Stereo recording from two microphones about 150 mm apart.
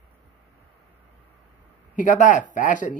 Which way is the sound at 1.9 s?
60° left (ahead or behind).